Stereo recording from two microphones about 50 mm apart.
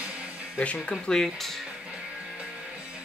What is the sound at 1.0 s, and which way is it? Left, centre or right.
Speech, centre.